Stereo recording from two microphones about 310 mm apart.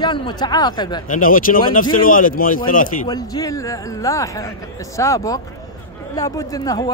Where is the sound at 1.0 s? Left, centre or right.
Left.